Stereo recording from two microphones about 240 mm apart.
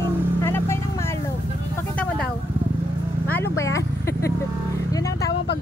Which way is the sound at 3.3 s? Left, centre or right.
Centre.